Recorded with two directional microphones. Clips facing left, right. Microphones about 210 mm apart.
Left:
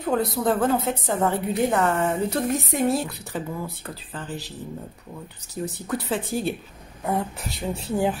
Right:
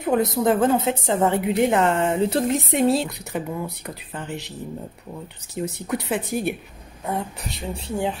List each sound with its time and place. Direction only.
0.0 s a woman's voice: 20° right (ahead or behind)
5.9 s a woman's voice: 20° right (ahead or behind)
7.1 s speech: centre (ahead or behind)